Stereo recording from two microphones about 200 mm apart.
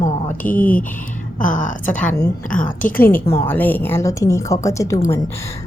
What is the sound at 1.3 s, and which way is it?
Speech, 40° left (ahead or behind).